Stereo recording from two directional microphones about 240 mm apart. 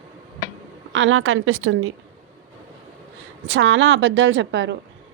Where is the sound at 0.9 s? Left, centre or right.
Right.